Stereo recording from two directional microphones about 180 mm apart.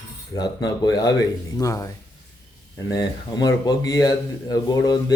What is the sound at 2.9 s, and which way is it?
Speech, 20° left (ahead or behind).